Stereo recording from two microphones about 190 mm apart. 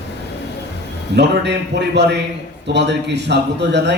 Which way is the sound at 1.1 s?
65° right (ahead or behind).